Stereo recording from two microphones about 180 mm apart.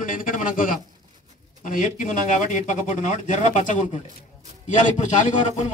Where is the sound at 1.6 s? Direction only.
45° left (ahead or behind).